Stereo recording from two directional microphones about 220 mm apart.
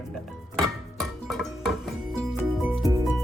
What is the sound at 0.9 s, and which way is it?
Music, centre (ahead or behind).